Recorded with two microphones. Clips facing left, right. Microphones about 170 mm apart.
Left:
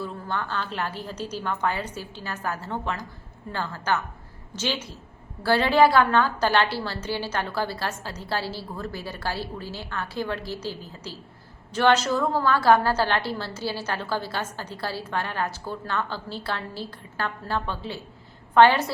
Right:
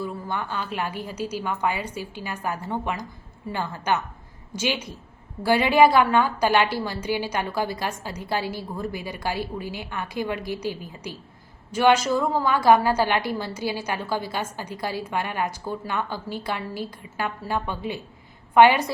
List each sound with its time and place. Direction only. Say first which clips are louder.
0.0 s a woman's voice: right 1 dB; 15° right (ahead or behind)